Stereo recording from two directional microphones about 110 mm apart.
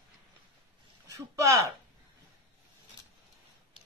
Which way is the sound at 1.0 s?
30° right (ahead or behind).